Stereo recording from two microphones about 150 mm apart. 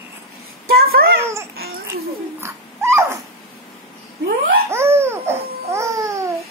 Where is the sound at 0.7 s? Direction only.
90° right.